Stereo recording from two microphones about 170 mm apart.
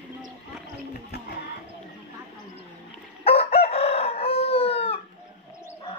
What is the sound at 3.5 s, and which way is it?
Chicken, 35° left (ahead or behind).